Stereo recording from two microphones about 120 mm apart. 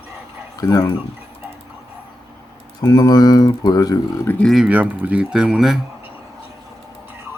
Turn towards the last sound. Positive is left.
turn(degrees=-5)  # may be behind; listen again after turning